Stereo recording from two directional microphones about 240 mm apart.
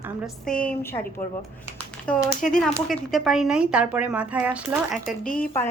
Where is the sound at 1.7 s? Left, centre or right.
Centre.